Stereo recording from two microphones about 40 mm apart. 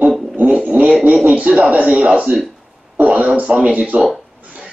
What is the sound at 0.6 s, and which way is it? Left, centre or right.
Speech, right.